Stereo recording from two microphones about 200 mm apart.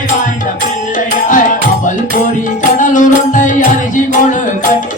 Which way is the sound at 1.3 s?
40° left (ahead or behind).